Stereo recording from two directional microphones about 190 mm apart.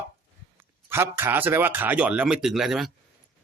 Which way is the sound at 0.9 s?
10° right (ahead or behind).